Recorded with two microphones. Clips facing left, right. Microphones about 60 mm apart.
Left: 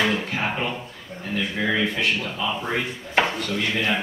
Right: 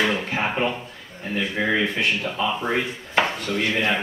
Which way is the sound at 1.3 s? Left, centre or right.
Centre.